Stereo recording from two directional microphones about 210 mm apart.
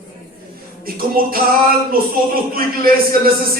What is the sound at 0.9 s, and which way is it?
Speech, 45° right (ahead or behind).